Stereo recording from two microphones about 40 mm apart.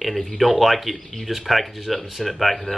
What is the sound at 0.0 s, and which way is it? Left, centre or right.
Speech, centre.